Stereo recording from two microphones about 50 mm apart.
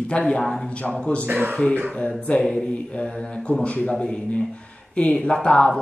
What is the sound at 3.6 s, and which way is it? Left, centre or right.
Speech, left.